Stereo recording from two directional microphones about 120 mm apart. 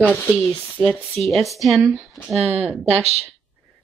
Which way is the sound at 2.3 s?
60° right (ahead or behind).